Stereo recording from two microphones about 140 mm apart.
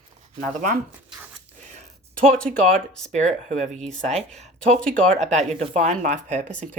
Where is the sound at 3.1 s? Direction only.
55° right (ahead or behind).